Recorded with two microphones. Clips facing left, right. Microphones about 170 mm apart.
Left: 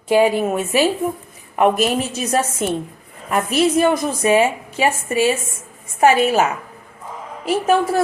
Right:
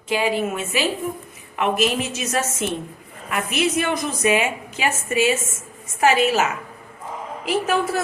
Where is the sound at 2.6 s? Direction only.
45° left (ahead or behind).